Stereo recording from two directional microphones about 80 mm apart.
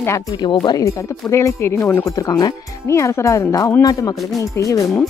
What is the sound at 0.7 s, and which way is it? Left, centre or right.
Speech, left.